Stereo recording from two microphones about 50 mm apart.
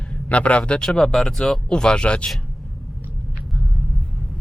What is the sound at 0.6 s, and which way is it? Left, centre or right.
Speech, centre.